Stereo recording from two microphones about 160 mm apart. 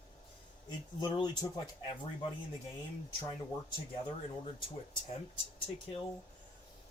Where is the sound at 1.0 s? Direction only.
30° left (ahead or behind).